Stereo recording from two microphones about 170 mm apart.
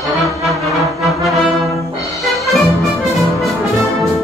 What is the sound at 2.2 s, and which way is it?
Music, centre (ahead or behind).